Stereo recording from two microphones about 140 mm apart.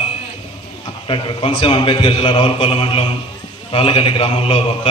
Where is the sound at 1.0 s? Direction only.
40° left (ahead or behind).